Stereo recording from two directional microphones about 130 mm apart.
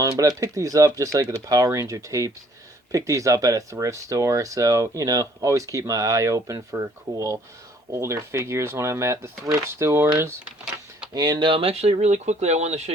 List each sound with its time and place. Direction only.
0.0 s speech: 25° right (ahead or behind)
11.1 s speech: 30° right (ahead or behind); by 12.9 s 60° right (ahead or behind)